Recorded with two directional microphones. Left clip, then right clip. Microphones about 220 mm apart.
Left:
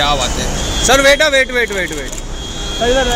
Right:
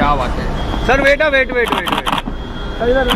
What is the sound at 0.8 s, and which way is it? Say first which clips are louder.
Speech: left 2 dB; 55° left (ahead or behind).